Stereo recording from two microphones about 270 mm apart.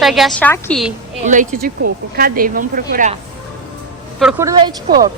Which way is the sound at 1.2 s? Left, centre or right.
Right.